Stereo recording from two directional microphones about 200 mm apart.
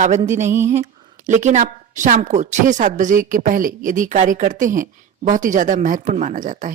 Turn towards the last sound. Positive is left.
turn(degrees=-40)  # may be behind; listen again after turning